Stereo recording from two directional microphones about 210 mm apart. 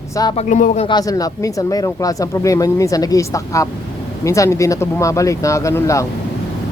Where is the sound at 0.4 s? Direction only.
35° left (ahead or behind).